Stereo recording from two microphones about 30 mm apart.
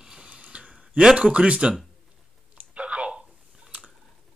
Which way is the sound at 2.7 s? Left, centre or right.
Right.